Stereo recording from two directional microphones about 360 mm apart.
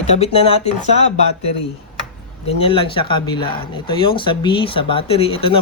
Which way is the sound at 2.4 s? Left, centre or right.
Centre.